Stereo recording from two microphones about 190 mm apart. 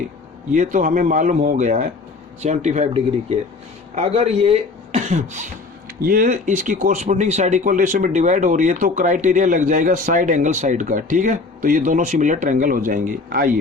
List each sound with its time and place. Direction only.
0.5 s speech: 40° right (ahead or behind)